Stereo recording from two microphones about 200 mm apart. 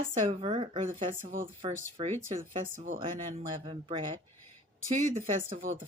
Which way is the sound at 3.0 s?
25° right (ahead or behind).